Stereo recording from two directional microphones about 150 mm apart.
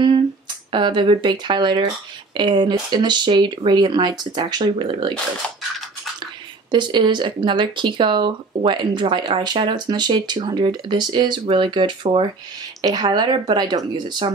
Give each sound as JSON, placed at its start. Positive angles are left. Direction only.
{"t": 0.7, "sound": "speech", "side_deg": -30}
{"t": 6.7, "sound": "speech", "side_deg": -30}